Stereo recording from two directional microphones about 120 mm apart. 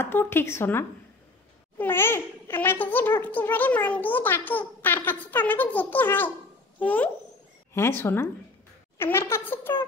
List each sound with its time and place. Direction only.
0.0 s a child's voice: 20° left (ahead or behind)
6.8 s a sound: 15° left (ahead or behind)
8.0 s speech: 20° left (ahead or behind)